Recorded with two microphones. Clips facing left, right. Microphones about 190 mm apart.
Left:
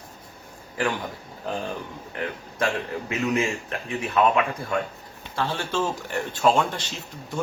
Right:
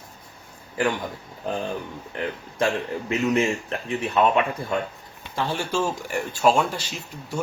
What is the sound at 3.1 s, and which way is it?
Speech, 30° right (ahead or behind).